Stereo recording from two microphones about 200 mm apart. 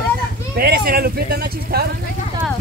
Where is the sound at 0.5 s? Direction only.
50° right (ahead or behind).